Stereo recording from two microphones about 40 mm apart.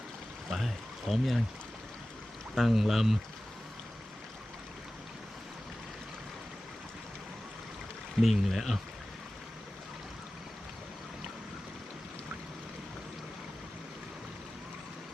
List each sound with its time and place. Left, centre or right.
0.5 s speech: centre
2.6 s speech: centre
8.2 s speech: centre